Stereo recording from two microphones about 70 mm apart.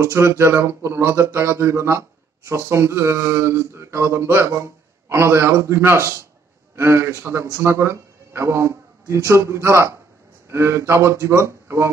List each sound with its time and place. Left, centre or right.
0.0 s speech: right